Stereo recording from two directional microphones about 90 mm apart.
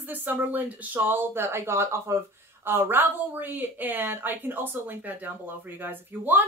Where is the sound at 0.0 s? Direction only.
20° right (ahead or behind).